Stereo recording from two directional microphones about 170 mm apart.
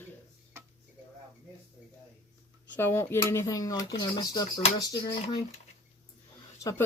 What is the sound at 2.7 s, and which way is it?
Speech, 10° left (ahead or behind).